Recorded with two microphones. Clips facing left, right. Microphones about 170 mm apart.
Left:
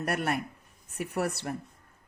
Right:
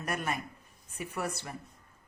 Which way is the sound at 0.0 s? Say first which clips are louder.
Left 5 dB; 65° left (ahead or behind).